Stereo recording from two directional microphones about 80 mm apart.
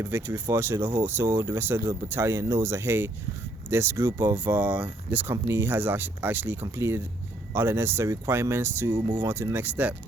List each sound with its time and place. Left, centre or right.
0.0 s speech: right
5.3 s speech: right